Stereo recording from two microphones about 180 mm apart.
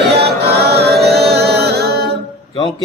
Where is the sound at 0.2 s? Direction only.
65° right (ahead or behind).